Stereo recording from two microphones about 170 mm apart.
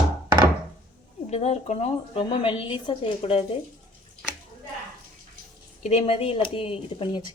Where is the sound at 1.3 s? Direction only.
40° left (ahead or behind).